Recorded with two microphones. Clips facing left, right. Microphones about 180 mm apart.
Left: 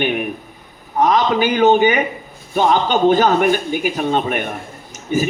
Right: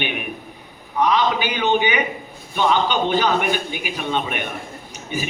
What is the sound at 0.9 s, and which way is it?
A man's voice, 45° left (ahead or behind).